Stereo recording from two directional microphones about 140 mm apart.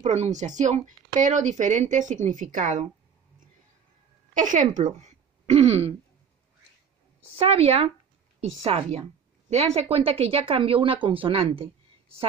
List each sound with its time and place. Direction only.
0.0 s speech: 55° right (ahead or behind)
4.3 s speech: 65° right (ahead or behind); by 5.9 s 45° right (ahead or behind)
7.3 s speech: 45° right (ahead or behind)